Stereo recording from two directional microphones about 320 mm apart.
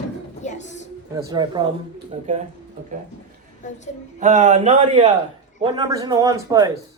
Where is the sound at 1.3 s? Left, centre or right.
Centre.